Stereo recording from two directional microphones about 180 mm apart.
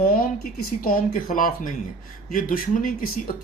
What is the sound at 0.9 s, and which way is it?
A man's voice, 50° left (ahead or behind).